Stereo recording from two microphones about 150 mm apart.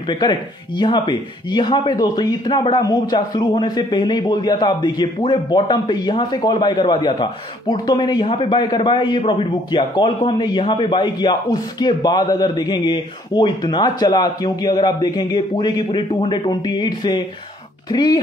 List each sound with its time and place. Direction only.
0.1 s speech: 30° left (ahead or behind)